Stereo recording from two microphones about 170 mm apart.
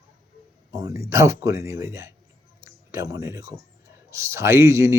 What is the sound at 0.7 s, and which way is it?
Speech, 20° right (ahead or behind).